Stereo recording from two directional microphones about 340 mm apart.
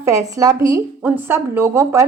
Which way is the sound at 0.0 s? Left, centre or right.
Centre.